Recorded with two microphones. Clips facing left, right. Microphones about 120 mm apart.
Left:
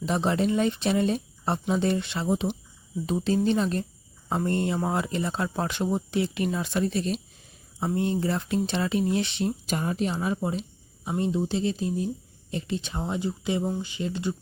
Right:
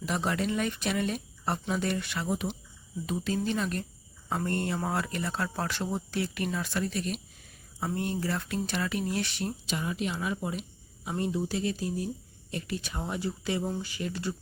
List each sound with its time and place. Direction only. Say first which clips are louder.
0.0 s speech: left 5 dB; 25° left (ahead or behind)
9.6 s a woman's voice: left 5 dB; 45° left (ahead or behind); by 14.3 s 20° left (ahead or behind)